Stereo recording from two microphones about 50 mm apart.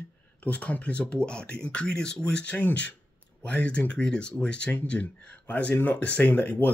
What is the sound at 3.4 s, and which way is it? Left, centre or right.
Speech, left.